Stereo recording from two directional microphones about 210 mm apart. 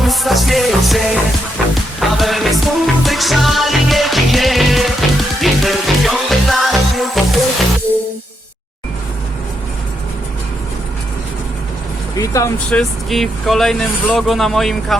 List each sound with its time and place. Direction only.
0.0 s music: centre (ahead or behind)
12.1 s speech: 15° left (ahead or behind)
12.8 s speech: centre (ahead or behind)